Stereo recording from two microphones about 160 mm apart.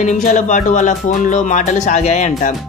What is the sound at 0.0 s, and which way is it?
Speech, 50° left (ahead or behind).